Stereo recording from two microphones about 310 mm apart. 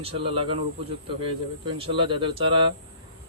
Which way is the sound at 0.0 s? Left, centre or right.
Centre.